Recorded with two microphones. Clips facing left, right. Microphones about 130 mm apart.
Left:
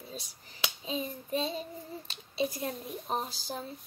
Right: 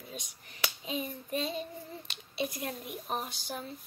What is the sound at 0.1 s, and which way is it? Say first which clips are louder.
Speech: left 1 dB; 35° left (ahead or behind).